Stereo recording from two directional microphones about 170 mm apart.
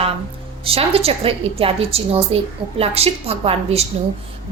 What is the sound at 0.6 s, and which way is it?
A woman's voice, 35° right (ahead or behind).